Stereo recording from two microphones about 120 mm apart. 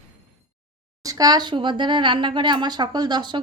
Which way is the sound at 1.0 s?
30° right (ahead or behind).